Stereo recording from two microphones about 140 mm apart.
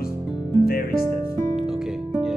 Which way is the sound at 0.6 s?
90° left.